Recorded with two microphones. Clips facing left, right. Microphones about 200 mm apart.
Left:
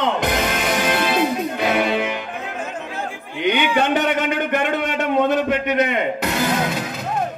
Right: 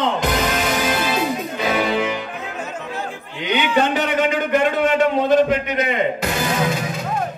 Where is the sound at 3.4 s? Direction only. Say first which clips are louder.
Even; 55° left (ahead or behind).